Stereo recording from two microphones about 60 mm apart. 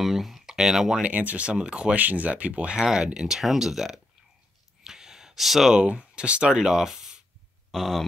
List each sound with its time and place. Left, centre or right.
0.0 s speech: centre
1.0 s speech: right
2.0 s speech: right; by 4.0 s centre
4.8 s gasp: centre
5.8 s speech: centre
7.7 s a man's voice: centre